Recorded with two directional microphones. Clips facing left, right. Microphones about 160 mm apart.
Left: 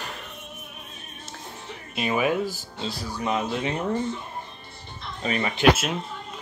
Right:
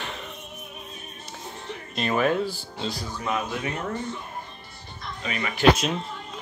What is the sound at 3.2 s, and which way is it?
Speech, 25° left (ahead or behind).